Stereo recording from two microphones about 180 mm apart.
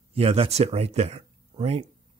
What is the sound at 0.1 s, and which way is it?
Speech, 35° right (ahead or behind).